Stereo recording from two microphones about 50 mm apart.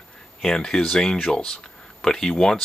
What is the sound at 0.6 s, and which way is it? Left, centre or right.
Speech, centre.